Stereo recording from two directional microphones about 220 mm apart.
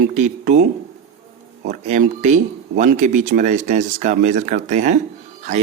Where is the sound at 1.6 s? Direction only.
35° right (ahead or behind).